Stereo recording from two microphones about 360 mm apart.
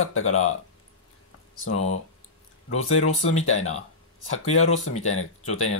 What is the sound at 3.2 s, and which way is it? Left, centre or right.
Speech, centre.